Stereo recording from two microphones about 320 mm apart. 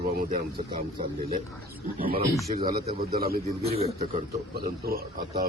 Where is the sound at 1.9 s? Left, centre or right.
Right.